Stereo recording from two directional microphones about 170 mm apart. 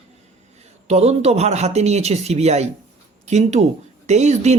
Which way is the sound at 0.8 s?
40° right (ahead or behind).